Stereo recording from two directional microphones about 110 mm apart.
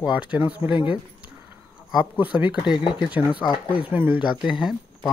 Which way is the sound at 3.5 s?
50° left (ahead or behind).